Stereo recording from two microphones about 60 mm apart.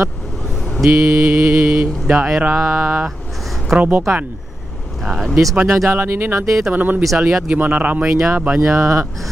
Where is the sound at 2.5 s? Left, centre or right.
Right.